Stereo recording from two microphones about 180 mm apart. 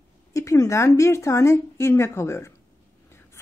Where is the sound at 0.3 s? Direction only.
20° left (ahead or behind).